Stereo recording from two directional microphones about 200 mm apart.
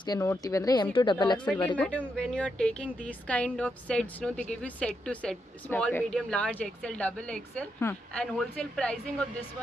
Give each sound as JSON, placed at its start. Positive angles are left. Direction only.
{"t": 0.0, "sound": "a woman's voice", "side_deg": 15}
{"t": 1.4, "sound": "speech", "side_deg": 5}